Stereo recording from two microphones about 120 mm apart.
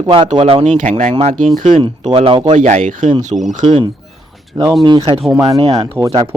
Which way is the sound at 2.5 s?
90° right.